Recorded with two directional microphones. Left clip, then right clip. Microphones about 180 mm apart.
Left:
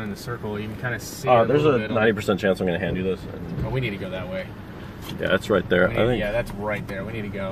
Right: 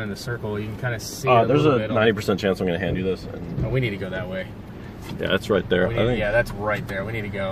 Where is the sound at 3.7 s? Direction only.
45° right (ahead or behind).